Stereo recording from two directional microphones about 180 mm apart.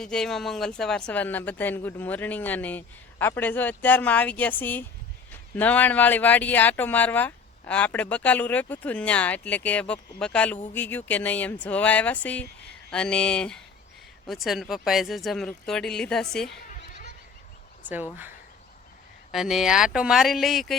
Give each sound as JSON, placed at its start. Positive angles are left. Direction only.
{"t": 0.0, "sound": "speech", "side_deg": 5}
{"t": 16.6, "sound": "fowl", "side_deg": 45}
{"t": 19.3, "sound": "speech", "side_deg": 0}